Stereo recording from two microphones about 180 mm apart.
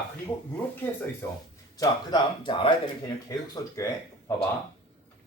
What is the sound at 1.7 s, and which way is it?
Speech, 20° left (ahead or behind).